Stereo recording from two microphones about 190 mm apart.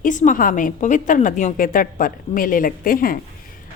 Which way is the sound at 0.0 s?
40° left (ahead or behind).